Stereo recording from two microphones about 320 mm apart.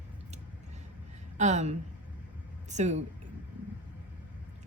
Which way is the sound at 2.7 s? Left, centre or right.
Right.